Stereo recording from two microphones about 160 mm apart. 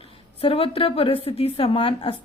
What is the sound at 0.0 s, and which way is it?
A woman's voice, 35° left (ahead or behind).